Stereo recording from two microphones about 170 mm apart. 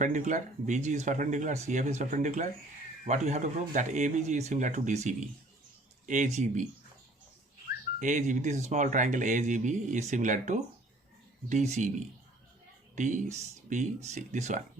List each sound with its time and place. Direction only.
0.0 s speech: 45° right (ahead or behind)
7.9 s speech: 45° right (ahead or behind)
13.0 s speech: 45° right (ahead or behind)